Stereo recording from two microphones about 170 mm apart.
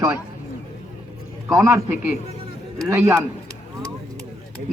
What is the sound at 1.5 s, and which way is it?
Speech, 15° right (ahead or behind).